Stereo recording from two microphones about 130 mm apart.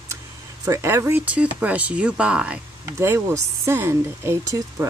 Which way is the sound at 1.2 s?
10° right (ahead or behind).